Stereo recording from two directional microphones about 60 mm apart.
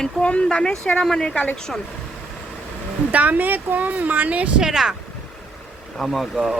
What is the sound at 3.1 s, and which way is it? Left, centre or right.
Speech, right.